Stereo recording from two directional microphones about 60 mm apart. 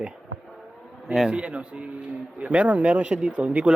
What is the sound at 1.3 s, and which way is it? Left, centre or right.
Speech, centre.